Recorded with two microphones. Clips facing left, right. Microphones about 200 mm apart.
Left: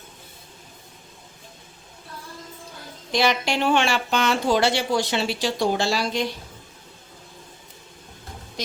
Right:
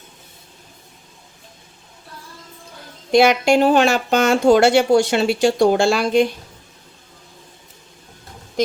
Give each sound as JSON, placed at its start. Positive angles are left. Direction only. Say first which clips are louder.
{"t": 3.2, "sound": "speech", "louder": "right 9 dB", "side_deg": -45}